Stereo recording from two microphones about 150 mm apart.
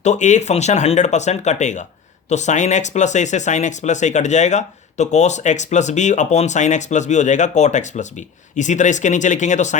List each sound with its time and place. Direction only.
0.0 s speech: 50° left (ahead or behind)